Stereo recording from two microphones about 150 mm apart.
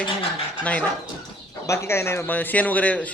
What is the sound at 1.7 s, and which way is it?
Speech, 20° left (ahead or behind).